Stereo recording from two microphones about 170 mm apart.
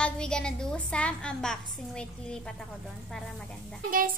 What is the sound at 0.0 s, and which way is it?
A woman's voice, 5° left (ahead or behind).